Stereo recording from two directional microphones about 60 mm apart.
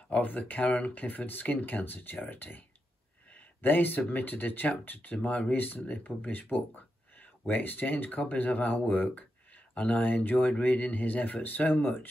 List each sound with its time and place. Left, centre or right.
0.1 s speech: left
3.3 s a sound: left
4.1 s speech: left
5.1 s speech: centre